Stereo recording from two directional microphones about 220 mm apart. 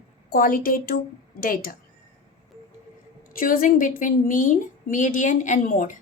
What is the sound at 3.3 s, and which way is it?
A woman's voice, 40° left (ahead or behind).